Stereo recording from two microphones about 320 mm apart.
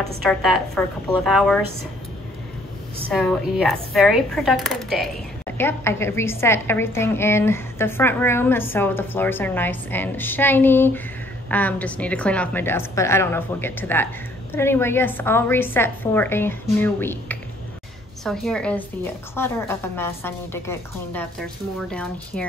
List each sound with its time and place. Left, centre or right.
0.2 s speech: centre
3.1 s a woman's voice: centre